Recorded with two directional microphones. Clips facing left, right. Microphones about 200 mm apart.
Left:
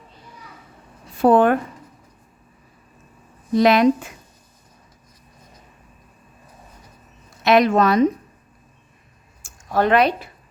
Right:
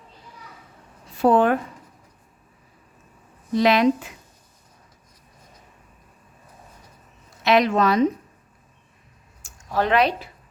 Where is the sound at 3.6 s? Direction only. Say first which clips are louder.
Left 3 dB; 45° left (ahead or behind).